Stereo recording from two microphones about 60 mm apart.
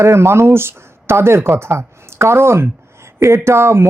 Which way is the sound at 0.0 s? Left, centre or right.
Right.